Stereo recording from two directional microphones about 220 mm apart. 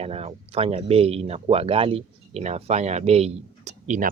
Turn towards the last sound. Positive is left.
turn(degrees=-35)  # may be behind; listen again after turning